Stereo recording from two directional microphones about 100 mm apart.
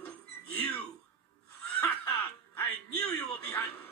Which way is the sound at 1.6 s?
20° left (ahead or behind).